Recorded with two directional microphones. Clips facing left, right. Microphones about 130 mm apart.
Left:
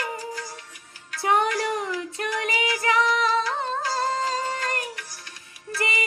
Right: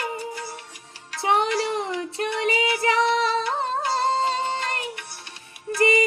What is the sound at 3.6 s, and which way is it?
Music, 30° right (ahead or behind).